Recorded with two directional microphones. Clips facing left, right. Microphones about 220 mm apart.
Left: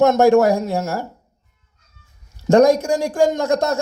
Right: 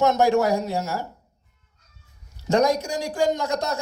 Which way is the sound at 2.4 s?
50° left (ahead or behind).